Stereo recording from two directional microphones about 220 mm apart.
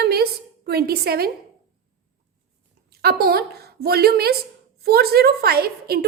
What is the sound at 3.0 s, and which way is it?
A woman's voice, 45° right (ahead or behind).